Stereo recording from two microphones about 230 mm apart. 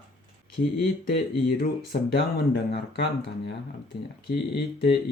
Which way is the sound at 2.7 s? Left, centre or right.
Left.